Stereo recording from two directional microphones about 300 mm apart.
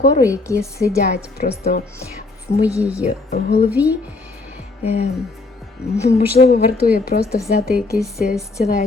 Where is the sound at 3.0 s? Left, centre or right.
Left.